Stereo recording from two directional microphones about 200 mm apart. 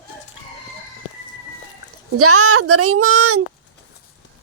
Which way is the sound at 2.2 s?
90° right.